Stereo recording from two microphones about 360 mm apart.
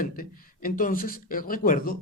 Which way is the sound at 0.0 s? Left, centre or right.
Left.